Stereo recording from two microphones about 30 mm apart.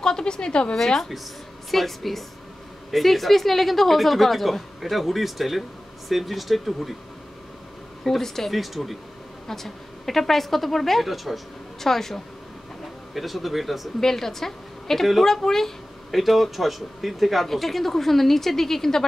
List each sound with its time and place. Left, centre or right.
0.0 s a woman's voice: left
0.7 s a woman's voice: centre
1.7 s a woman's voice: centre
8.0 s a woman's voice: centre
8.5 s a woman's voice: centre
9.5 s a woman's voice: centre
11.8 s a woman's voice: centre
13.1 s a woman's voice: centre
13.9 s a woman's voice: centre
16.1 s a woman's voice: centre